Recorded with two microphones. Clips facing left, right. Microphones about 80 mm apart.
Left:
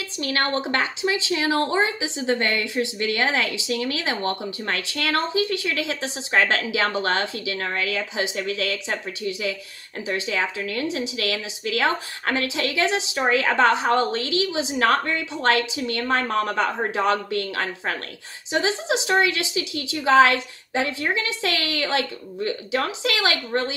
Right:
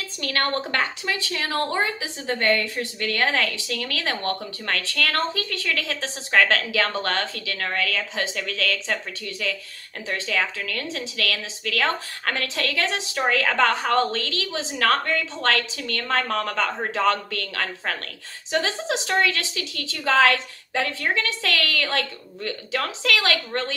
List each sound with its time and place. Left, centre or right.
0.3 s speech: left